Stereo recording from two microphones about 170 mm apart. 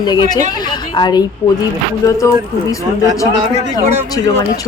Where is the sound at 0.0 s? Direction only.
25° left (ahead or behind).